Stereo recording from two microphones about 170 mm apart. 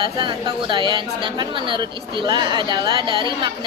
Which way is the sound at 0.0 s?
30° right (ahead or behind).